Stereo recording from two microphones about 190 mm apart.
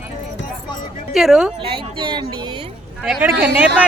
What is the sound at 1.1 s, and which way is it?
Speech, centre (ahead or behind).